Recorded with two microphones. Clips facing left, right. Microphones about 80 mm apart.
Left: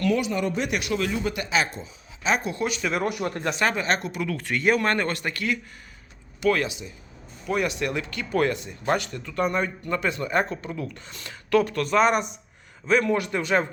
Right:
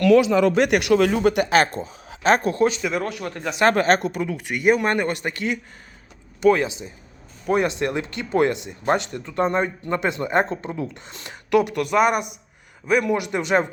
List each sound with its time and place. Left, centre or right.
0.0 s speech: right
3.0 s speech: centre
3.7 s speech: right
4.3 s a man's voice: centre